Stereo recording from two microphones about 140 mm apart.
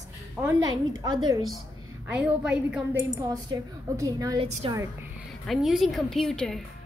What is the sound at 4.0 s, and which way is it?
Speech, 25° right (ahead or behind).